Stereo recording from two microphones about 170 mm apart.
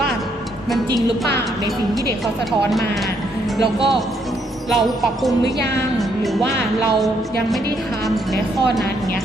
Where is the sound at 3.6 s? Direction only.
30° right (ahead or behind).